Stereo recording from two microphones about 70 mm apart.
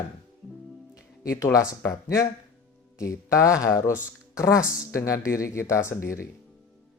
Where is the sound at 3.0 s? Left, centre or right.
Left.